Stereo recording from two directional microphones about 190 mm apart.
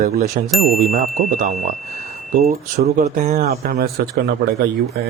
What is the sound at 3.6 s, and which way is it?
Speech, 50° right (ahead or behind).